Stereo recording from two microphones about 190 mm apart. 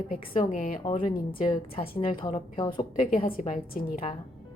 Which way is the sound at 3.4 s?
35° left (ahead or behind).